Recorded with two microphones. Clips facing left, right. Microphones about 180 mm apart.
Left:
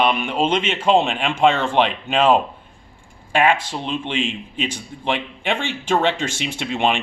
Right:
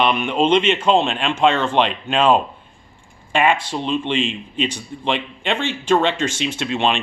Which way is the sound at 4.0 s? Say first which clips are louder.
Right 2 dB; 10° left (ahead or behind).